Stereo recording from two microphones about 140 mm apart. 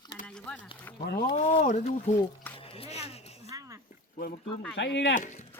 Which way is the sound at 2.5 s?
40° left (ahead or behind).